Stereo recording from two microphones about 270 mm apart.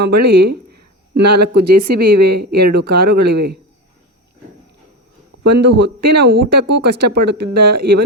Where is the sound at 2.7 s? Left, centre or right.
Right.